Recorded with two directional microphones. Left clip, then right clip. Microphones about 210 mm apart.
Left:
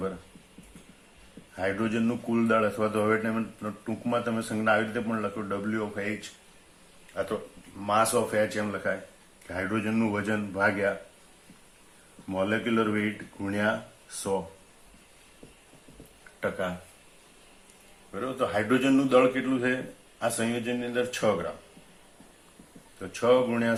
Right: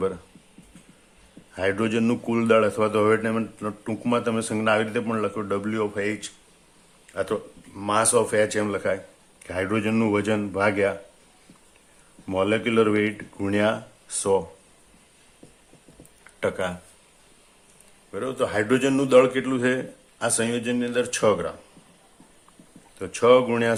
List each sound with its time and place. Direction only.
1.5 s speech: 45° right (ahead or behind)
12.3 s speech: 45° right (ahead or behind)
18.1 s speech: 45° right (ahead or behind)
23.0 s speech: 45° right (ahead or behind)